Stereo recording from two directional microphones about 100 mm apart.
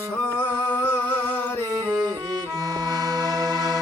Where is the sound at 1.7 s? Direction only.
35° right (ahead or behind).